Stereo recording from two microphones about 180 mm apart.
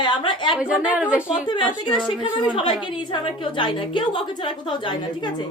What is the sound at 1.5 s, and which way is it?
A woman's voice, 25° left (ahead or behind).